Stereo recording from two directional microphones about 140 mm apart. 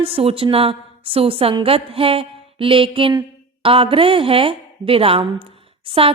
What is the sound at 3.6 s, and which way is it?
A woman's voice, 40° right (ahead or behind).